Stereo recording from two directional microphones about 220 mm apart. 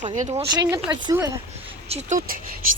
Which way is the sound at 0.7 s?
20° right (ahead or behind).